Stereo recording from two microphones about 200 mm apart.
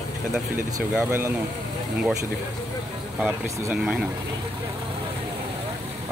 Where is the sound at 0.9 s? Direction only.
10° right (ahead or behind).